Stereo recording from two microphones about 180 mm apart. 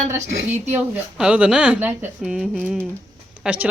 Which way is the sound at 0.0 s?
45° right (ahead or behind).